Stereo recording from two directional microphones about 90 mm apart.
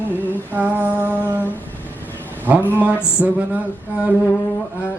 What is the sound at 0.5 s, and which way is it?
Female singing, 20° right (ahead or behind).